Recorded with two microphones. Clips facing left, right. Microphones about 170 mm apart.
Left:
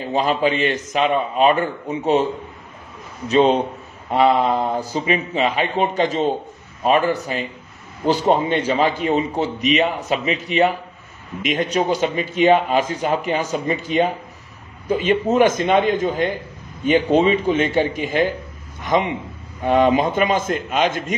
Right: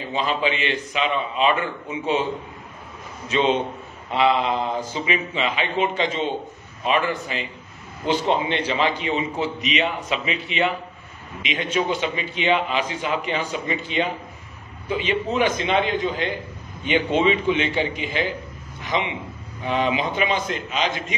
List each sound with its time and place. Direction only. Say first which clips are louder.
0.1 s a man's voice: left 5 dB; 45° left (ahead or behind)
3.3 s a man's voice: left 5 dB; 40° left (ahead or behind)
18.8 s a sound: left 6 dB; 45° left (ahead or behind)
19.6 s a man's voice: left 7 dB; 50° left (ahead or behind)